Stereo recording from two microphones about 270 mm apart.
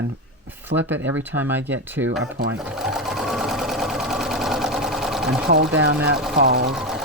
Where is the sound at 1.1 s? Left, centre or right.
Centre.